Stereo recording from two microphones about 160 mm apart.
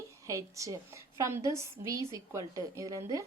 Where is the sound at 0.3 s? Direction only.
20° right (ahead or behind).